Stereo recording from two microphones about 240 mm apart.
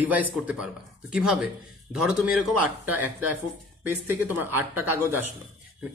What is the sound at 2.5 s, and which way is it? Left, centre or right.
Speech, right.